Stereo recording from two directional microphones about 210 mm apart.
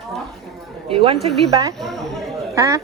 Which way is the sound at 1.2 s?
25° right (ahead or behind).